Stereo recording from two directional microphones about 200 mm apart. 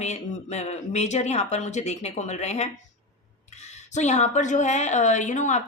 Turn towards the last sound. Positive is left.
turn(degrees=35)  # may be behind; listen again after turning